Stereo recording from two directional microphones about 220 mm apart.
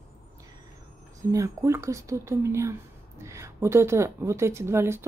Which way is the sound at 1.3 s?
15° right (ahead or behind).